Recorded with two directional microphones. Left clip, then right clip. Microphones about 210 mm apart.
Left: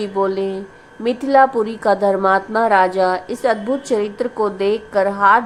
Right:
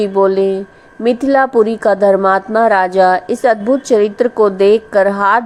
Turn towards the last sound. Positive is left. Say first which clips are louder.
# right 2 dB
turn(degrees=-25)  # may be behind; listen again after turning